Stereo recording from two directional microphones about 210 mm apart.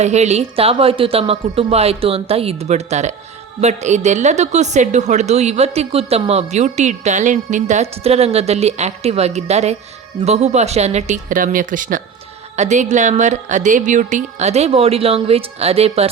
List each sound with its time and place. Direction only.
0.0 s a woman's voice: 30° right (ahead or behind)